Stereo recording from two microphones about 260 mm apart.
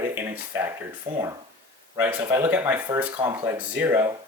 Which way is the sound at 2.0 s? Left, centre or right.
Centre.